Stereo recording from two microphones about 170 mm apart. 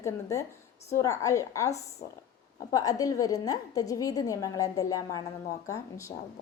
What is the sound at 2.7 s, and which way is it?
Child singing, 20° left (ahead or behind).